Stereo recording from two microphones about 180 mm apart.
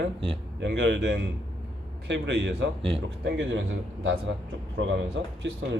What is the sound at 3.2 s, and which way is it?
Speech, 85° right.